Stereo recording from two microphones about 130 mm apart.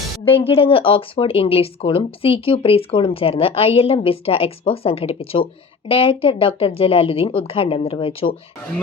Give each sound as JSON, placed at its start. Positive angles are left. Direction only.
{"t": 0.4, "sound": "speech", "side_deg": 45}